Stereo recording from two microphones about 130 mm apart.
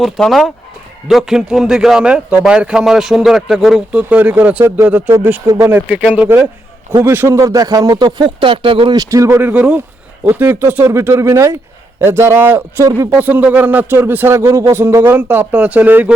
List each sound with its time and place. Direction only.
0.0 s a man's voice: centre (ahead or behind); by 9.0 s 40° right (ahead or behind)
9.0 s speech: 25° right (ahead or behind)